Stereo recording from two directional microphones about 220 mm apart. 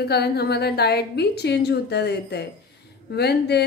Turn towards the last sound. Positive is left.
turn(degrees=50)  # may be behind; listen again after turning